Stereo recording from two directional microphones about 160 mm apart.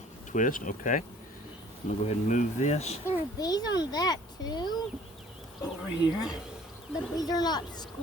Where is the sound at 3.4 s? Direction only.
25° left (ahead or behind).